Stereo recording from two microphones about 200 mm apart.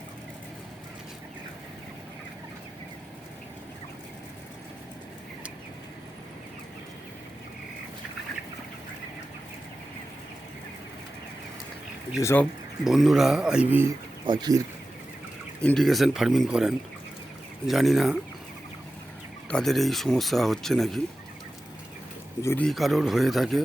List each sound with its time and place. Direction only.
12.2 s speech: 10° left (ahead or behind)
12.8 s speech: centre (ahead or behind)
14.3 s speech: 20° right (ahead or behind)
15.6 s speech: centre (ahead or behind)
19.5 s speech: centre (ahead or behind)
22.4 s speech: 10° left (ahead or behind)